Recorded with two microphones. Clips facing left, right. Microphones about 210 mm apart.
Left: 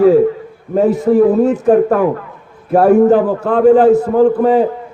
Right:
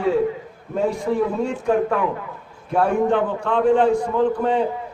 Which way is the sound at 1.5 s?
40° left (ahead or behind).